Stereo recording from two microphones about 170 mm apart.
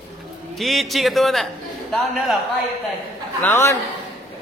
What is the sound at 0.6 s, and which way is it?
Speech, centre (ahead or behind).